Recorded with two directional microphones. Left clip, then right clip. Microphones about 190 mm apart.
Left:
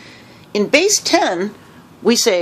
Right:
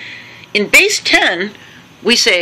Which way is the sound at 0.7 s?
15° left (ahead or behind).